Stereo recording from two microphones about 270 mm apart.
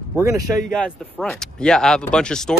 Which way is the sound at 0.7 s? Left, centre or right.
Centre.